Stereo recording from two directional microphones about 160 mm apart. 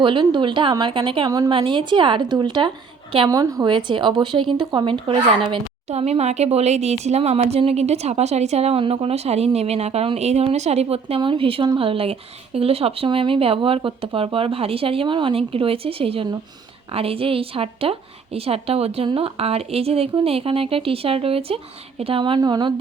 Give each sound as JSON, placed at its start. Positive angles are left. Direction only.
{"t": 0.0, "sound": "speech", "side_deg": -30}
{"t": 3.2, "sound": "speech", "side_deg": -20}